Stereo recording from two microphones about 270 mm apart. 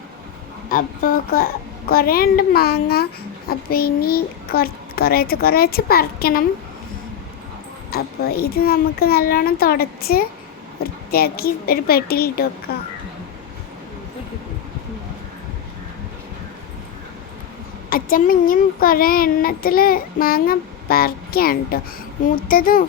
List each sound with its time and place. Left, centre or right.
0.7 s speech: left
7.9 s speech: left
17.8 s speech: left